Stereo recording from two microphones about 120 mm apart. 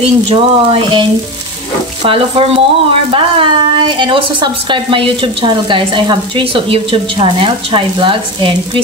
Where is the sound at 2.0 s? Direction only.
50° right (ahead or behind).